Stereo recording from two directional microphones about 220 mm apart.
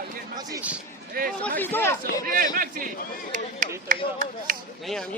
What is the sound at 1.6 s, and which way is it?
Chatter, 10° left (ahead or behind).